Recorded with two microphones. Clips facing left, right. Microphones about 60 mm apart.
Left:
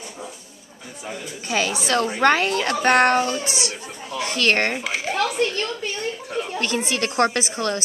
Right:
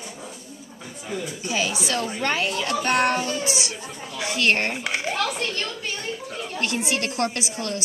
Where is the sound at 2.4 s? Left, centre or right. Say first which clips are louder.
Left 4 dB; left.